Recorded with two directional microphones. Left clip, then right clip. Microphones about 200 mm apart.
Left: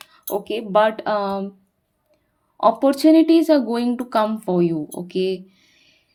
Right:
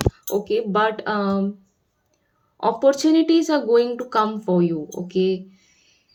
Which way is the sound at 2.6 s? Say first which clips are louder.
Left 2 dB; 35° left (ahead or behind).